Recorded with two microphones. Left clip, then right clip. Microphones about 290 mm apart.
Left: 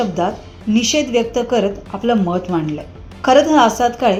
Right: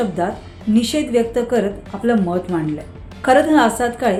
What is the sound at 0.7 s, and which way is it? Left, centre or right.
Speech, right.